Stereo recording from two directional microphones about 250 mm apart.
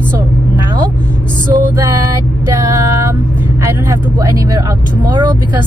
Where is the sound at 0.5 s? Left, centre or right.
Centre.